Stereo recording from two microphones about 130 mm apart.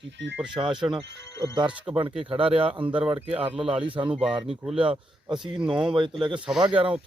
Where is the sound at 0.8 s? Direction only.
35° right (ahead or behind).